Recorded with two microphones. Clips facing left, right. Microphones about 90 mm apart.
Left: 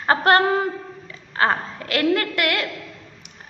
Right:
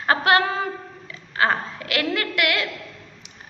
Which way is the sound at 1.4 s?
40° left (ahead or behind).